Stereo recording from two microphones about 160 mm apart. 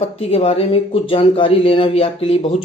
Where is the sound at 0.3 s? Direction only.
40° left (ahead or behind).